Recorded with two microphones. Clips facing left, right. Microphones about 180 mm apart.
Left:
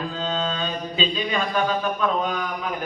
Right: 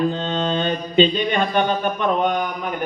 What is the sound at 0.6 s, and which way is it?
A man's voice, 65° right (ahead or behind).